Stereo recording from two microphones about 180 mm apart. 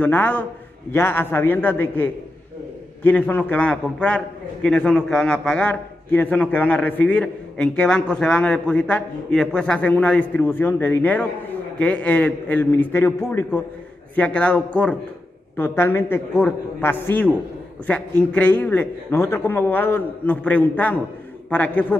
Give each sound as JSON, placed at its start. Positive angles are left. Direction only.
{"t": 0.0, "sound": "a man's voice", "side_deg": 10}